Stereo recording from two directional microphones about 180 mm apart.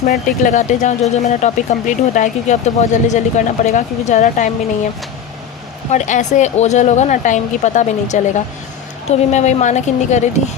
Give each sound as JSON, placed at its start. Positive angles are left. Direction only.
{"t": 0.1, "sound": "speech", "side_deg": 45}
{"t": 5.9, "sound": "speech", "side_deg": 40}